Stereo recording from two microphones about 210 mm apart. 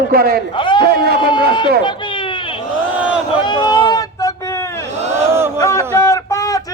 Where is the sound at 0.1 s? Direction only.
45° right (ahead or behind).